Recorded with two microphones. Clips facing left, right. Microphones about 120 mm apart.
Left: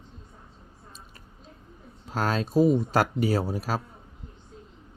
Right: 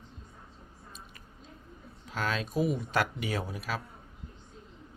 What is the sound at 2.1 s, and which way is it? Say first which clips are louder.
Speech: left 6 dB; 40° left (ahead or behind).